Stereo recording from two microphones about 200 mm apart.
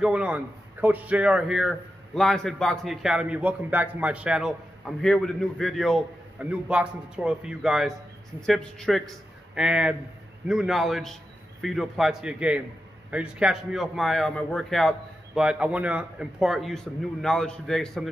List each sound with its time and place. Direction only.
0.0 s a man's voice: 5° right (ahead or behind)